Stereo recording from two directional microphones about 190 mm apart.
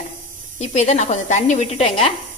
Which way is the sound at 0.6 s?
35° left (ahead or behind).